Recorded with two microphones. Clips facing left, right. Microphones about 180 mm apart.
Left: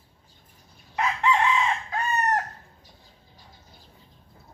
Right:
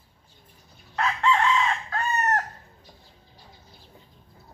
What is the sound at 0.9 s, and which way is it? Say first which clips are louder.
Chicken: even; 15° left (ahead or behind).